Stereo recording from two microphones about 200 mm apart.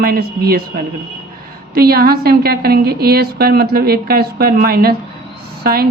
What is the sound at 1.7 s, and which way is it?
A woman's voice, 50° right (ahead or behind).